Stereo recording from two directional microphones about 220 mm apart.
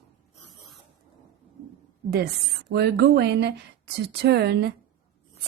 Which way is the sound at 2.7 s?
45° right (ahead or behind).